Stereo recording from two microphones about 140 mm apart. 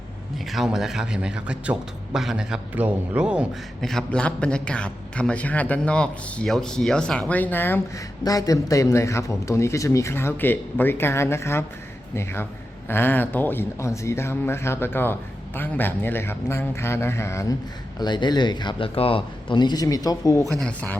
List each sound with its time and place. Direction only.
0.5 s a man's voice: 5° right (ahead or behind)
3.8 s speech: 5° left (ahead or behind)
8.2 s a man's voice: 25° left (ahead or behind)
18.0 s speech: 30° left (ahead or behind)
20.6 s speech: 10° left (ahead or behind)